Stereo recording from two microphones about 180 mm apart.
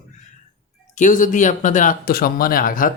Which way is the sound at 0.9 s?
45° left (ahead or behind).